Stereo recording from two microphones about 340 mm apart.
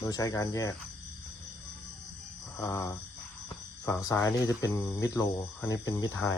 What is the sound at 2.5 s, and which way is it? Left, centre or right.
Speech, centre.